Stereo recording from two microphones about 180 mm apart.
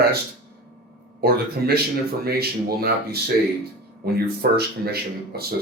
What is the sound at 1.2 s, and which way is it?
Speech, 60° right (ahead or behind).